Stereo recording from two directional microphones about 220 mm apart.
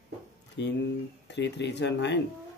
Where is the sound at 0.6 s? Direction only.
50° left (ahead or behind).